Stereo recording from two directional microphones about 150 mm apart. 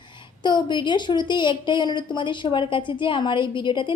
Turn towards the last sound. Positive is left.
turn(degrees=35)  # may be behind; listen again after turning